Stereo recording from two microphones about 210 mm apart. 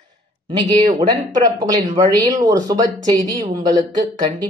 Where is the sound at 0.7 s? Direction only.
20° right (ahead or behind).